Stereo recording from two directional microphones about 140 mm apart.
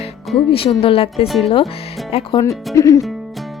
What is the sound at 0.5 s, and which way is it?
Speech, 40° left (ahead or behind).